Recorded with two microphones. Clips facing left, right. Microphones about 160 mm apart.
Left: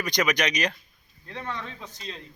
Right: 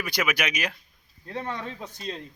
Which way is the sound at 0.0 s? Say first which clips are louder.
Left 3 dB; 5° right (ahead or behind).